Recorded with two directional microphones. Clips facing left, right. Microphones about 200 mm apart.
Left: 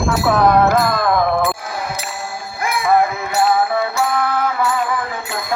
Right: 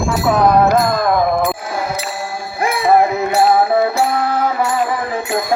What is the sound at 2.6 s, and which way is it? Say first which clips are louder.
Music: right 3 dB; 30° right (ahead or behind).